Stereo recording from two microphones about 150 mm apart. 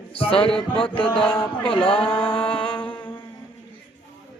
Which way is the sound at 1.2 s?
40° left (ahead or behind).